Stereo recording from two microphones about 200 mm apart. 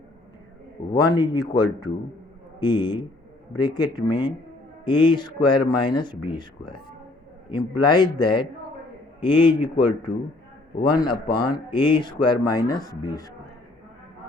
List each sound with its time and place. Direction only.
0.9 s speech: 20° left (ahead or behind)
7.5 s speech: 20° left (ahead or behind)
10.8 s speech: 20° left (ahead or behind)